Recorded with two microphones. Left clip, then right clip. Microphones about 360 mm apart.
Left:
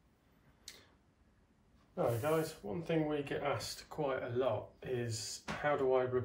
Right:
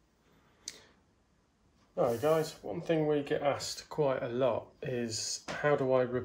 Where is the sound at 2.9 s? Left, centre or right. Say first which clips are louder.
Right 6 dB; right.